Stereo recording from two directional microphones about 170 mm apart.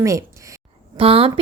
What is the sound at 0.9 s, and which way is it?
Speech, 35° right (ahead or behind).